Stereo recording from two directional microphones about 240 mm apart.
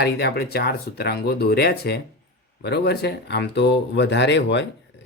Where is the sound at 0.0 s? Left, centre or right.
Left.